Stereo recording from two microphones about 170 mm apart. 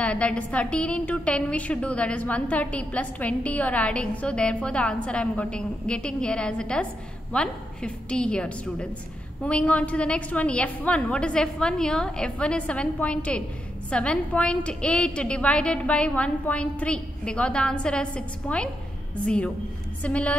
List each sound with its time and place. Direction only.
0.0 s a woman's voice: 5° left (ahead or behind)